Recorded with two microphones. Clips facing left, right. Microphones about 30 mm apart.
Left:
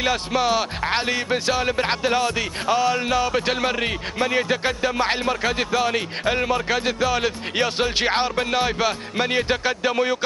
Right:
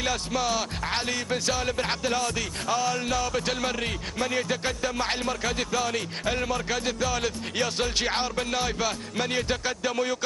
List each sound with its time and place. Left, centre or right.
0.0 s music: left